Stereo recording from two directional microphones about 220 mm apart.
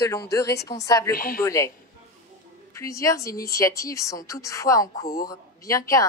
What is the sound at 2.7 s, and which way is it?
Speech, 15° left (ahead or behind).